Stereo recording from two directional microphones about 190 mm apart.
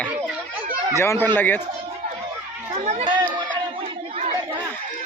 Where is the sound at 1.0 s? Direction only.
10° left (ahead or behind).